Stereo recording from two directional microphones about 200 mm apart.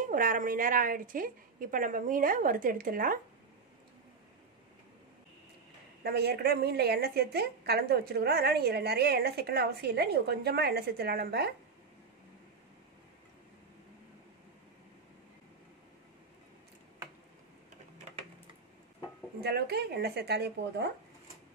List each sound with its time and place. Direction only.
0.0 s a woman's voice: 45° right (ahead or behind)
6.0 s a woman's voice: 50° right (ahead or behind)
19.4 s a woman's voice: 55° right (ahead or behind)